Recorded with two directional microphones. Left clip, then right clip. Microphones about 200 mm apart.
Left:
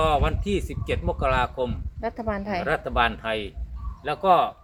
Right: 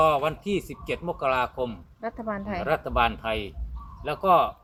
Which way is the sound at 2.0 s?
30° left (ahead or behind).